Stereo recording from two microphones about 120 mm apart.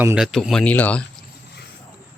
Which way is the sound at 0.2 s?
Centre (ahead or behind).